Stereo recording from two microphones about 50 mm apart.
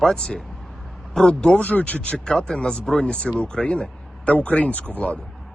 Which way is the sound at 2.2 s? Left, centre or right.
Centre.